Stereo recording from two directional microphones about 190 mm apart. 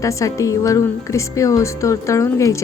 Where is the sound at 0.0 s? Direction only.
15° left (ahead or behind).